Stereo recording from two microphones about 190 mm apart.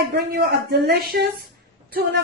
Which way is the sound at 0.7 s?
60° right (ahead or behind).